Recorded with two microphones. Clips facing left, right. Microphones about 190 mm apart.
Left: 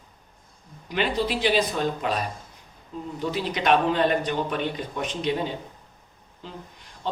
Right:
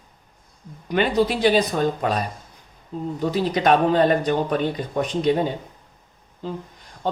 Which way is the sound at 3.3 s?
40° right (ahead or behind).